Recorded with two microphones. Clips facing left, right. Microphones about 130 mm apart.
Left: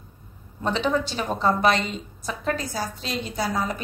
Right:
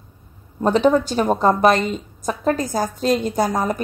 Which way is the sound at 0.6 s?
45° right (ahead or behind).